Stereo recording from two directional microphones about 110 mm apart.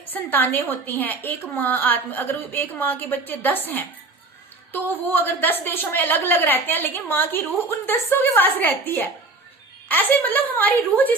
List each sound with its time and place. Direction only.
0.0 s a woman's voice: 15° left (ahead or behind)
5.0 s a woman's voice: 20° left (ahead or behind)